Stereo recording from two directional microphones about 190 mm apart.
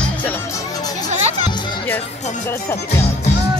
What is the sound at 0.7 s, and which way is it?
Music, 20° left (ahead or behind).